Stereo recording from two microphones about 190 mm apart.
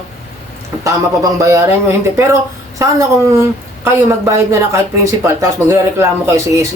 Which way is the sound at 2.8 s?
15° right (ahead or behind).